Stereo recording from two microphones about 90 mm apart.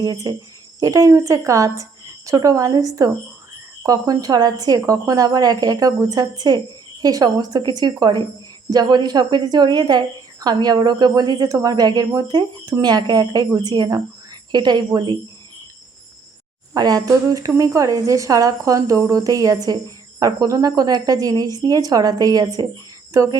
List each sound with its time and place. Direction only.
0.0 s a woman's voice: 45° right (ahead or behind)
16.7 s a woman's voice: 45° right (ahead or behind)